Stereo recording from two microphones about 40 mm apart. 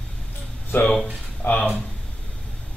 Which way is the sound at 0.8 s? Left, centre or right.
Centre.